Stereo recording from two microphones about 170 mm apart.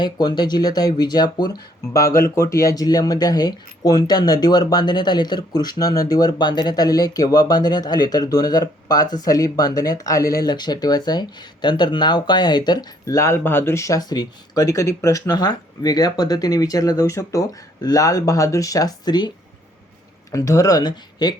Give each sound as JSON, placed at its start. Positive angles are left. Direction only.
{"t": 0.0, "sound": "speech", "side_deg": 25}
{"t": 20.3, "sound": "speech", "side_deg": 20}